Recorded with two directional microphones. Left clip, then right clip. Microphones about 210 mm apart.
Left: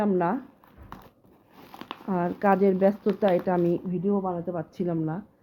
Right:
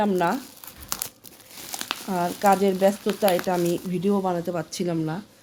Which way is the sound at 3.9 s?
25° right (ahead or behind).